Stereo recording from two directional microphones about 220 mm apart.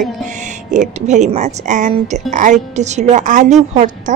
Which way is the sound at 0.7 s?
35° right (ahead or behind).